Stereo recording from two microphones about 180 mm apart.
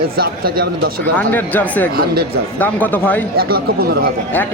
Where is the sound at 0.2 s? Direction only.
55° right (ahead or behind).